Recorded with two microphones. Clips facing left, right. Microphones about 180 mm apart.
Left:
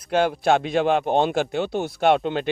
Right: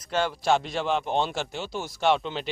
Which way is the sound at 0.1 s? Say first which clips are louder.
Left 5 dB; 55° left (ahead or behind).